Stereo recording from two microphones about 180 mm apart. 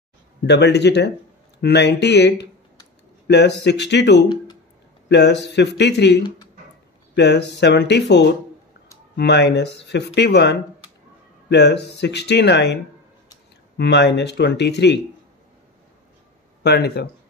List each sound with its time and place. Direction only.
0.5 s speech: 70° left (ahead or behind)
13.7 s speech: 70° left (ahead or behind)
16.6 s speech: 60° left (ahead or behind)